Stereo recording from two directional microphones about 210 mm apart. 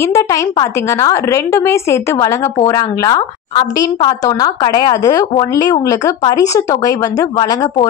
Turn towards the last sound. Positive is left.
turn(degrees=15)  # may be behind; listen again after turning